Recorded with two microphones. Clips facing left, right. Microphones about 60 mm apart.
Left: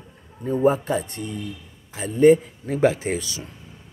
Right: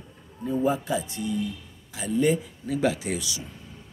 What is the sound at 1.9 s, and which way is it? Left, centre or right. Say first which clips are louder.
Speech: left 8 dB; left.